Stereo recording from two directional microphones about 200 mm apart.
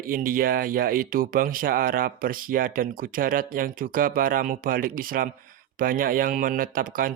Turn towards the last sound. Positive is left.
turn(degrees=-45)  # may be behind; listen again after turning